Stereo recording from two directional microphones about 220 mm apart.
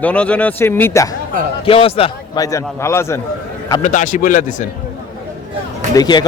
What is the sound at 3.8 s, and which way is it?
Speech, 35° left (ahead or behind).